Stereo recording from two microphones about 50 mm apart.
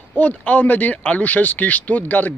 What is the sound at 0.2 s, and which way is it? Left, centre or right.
Speech, left.